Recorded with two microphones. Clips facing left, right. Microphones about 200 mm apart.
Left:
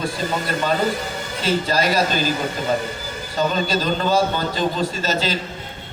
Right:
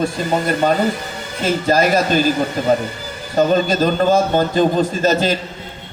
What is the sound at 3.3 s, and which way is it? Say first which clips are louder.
A man's voice: right 6 dB; 50° right (ahead or behind).